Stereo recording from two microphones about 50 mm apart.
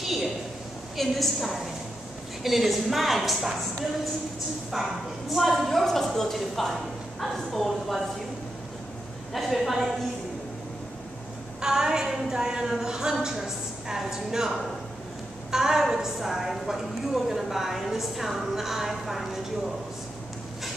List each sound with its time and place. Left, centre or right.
0.0 s a man's voice: centre
4.7 s a woman's voice: centre
9.3 s a woman's voice: centre
11.6 s a woman's voice: centre